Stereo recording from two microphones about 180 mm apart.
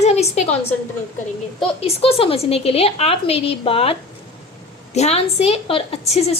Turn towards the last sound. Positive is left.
turn(degrees=35)  # may be behind; listen again after turning